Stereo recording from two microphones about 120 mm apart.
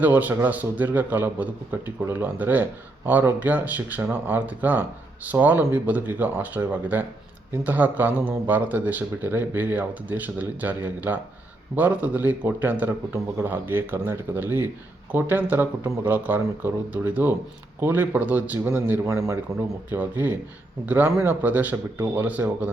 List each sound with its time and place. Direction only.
0.0 s speech: 15° right (ahead or behind)
19.0 s speech: 25° right (ahead or behind)
19.9 s speech: 15° right (ahead or behind)